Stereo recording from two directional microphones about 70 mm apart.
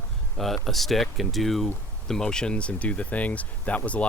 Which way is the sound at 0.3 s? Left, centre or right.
Centre.